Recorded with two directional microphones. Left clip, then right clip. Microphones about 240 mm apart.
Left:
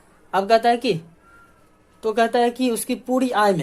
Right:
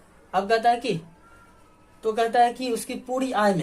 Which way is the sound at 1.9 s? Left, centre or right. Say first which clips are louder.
Left 2 dB; left.